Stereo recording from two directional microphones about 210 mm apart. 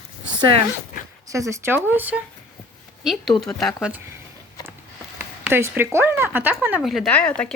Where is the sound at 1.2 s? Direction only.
15° right (ahead or behind).